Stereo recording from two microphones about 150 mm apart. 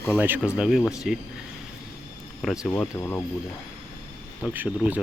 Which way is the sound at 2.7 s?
15° left (ahead or behind).